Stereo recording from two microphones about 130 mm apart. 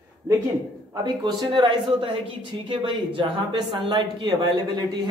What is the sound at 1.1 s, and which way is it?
Speech, 35° right (ahead or behind).